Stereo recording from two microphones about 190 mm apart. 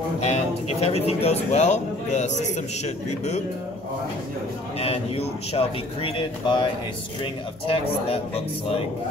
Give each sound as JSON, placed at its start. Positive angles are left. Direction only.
{"t": 0.2, "sound": "a man's voice", "side_deg": 35}
{"t": 4.7, "sound": "a man's voice", "side_deg": 30}